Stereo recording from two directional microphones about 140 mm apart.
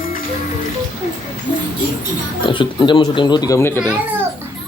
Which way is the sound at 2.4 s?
35° left (ahead or behind).